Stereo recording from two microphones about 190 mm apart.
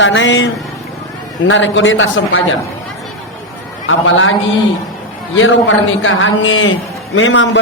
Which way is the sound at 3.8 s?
90° left.